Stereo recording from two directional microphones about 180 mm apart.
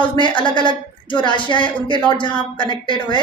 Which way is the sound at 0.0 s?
25° left (ahead or behind).